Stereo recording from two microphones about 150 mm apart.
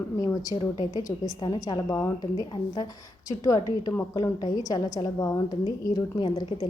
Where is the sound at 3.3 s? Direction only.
25° left (ahead or behind).